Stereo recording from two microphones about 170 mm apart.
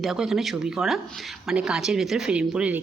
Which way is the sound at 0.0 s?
Centre (ahead or behind).